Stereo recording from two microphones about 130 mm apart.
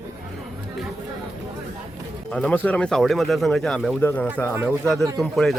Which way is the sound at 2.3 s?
10° left (ahead or behind).